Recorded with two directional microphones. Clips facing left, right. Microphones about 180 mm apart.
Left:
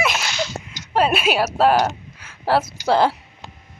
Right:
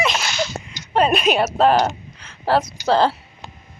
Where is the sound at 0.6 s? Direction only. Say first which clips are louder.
Right 1 dB; 5° left (ahead or behind).